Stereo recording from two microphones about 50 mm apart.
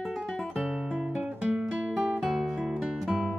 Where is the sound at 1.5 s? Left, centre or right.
Right.